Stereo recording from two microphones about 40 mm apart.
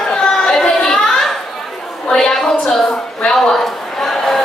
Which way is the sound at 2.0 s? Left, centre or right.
Centre.